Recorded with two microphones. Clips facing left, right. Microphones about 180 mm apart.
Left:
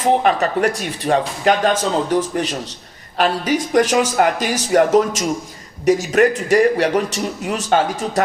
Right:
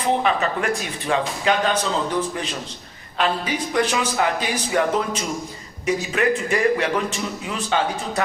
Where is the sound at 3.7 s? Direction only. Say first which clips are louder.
Left 6 dB; 45° left (ahead or behind).